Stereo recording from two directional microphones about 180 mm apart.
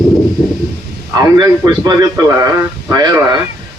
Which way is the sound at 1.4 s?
25° right (ahead or behind).